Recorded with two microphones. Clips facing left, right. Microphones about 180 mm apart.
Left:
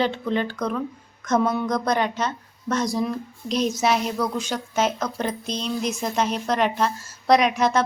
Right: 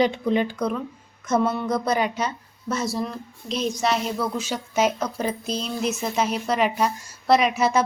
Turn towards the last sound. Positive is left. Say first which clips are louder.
# left 1 dB
turn(degrees=-5)  # may be behind; listen again after turning